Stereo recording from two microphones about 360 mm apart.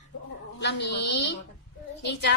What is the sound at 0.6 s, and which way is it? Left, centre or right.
A woman's voice, left.